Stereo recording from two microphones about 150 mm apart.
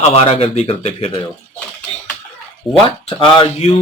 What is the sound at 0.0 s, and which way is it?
Speech, 45° left (ahead or behind).